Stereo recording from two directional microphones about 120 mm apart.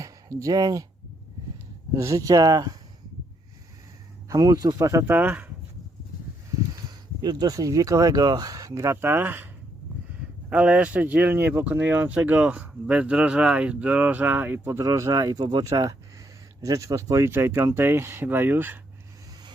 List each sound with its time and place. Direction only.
0.0 s speech: 25° right (ahead or behind)
2.0 s speech: 25° right (ahead or behind)
4.3 s speech: 30° right (ahead or behind)
5.1 s speech: 15° right (ahead or behind)
6.8 s speech: 35° right (ahead or behind); by 9.5 s 15° right (ahead or behind)
10.5 s speech: 10° right (ahead or behind)